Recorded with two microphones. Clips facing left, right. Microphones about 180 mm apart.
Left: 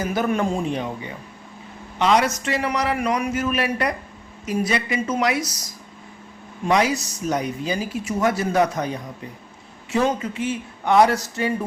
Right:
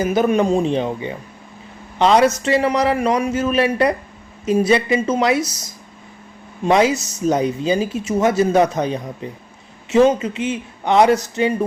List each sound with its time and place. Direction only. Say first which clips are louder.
0.0 s speech: right 6 dB; 20° right (ahead or behind)